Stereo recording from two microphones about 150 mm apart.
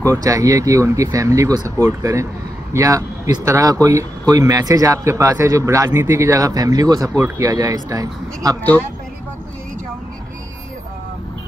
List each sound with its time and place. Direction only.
0.0 s speech: 20° right (ahead or behind)